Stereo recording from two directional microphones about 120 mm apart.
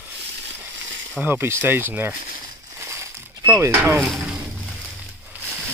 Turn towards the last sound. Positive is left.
turn(degrees=-5)  # may be behind; listen again after turning